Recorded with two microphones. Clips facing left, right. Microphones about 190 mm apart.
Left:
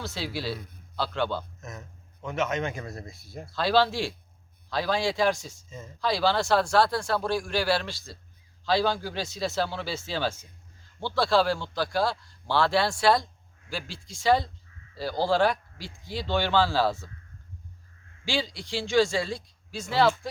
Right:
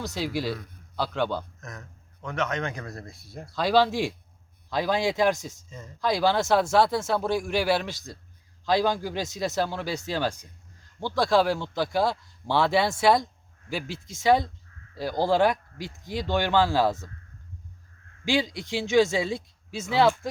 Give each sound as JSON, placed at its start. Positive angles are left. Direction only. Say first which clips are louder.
{"t": 0.0, "sound": "speech", "louder": "right 4 dB", "side_deg": -15}
{"t": 1.6, "sound": "speech", "louder": "left 1 dB", "side_deg": 25}
{"t": 2.2, "sound": "speech", "louder": "left 1 dB", "side_deg": 5}
{"t": 2.8, "sound": "speech", "louder": "even", "side_deg": 20}
{"t": 3.1, "sound": "speech", "louder": "even", "side_deg": 0}
{"t": 3.5, "sound": "a man's voice", "louder": "right 2 dB", "side_deg": -15}
{"t": 18.3, "sound": "a man's voice", "louder": "right 4 dB", "side_deg": -20}